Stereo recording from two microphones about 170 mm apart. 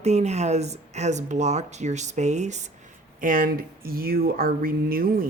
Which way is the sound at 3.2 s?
55° right (ahead or behind).